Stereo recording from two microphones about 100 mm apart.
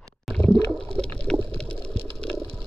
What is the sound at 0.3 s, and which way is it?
Water, 5° left (ahead or behind).